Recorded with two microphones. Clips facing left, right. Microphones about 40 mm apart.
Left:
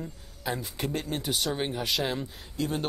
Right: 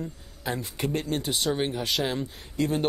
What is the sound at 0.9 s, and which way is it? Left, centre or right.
Speech, right.